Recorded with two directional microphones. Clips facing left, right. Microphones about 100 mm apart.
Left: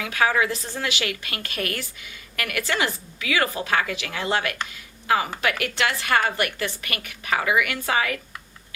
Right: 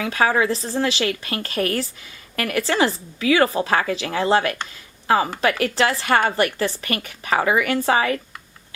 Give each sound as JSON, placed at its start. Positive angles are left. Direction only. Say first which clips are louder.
{"t": 0.0, "sound": "a woman's voice", "louder": "right 3 dB", "side_deg": -30}